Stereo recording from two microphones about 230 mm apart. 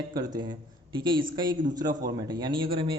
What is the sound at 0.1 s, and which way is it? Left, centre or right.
A man's voice, centre.